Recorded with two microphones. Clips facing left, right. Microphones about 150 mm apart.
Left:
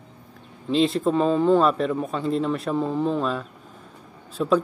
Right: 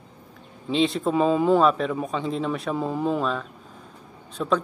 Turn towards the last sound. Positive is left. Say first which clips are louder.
# left 3 dB
turn(degrees=5)  # may be behind; listen again after turning